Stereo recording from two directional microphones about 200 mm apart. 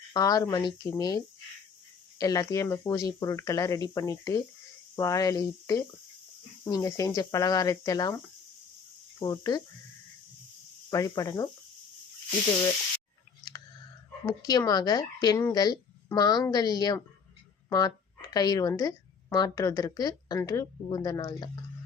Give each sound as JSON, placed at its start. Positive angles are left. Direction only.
{"t": 0.1, "sound": "speech", "side_deg": 20}
{"t": 9.1, "sound": "speech", "side_deg": 20}
{"t": 10.8, "sound": "speech", "side_deg": 15}
{"t": 14.3, "sound": "speech", "side_deg": 20}